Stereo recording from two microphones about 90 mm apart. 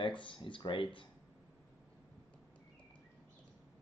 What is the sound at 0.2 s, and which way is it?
Speech, 70° left (ahead or behind).